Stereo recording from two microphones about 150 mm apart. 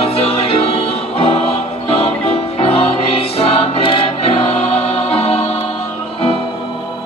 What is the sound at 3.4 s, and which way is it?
Choir, 40° left (ahead or behind).